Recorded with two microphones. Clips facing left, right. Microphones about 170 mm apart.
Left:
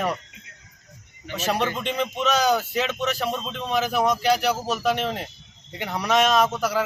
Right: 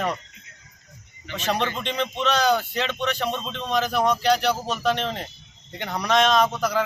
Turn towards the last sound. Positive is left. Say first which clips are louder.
# even
turn(degrees=10)  # may be behind; listen again after turning